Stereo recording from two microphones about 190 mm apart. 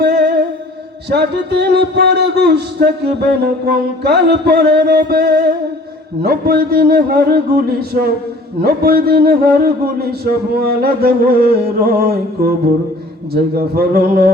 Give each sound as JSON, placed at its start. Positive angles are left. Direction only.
{"t": 0.0, "sound": "music", "side_deg": -55}
{"t": 1.1, "sound": "a sound", "side_deg": -60}
{"t": 8.6, "sound": "a man's voice", "side_deg": -50}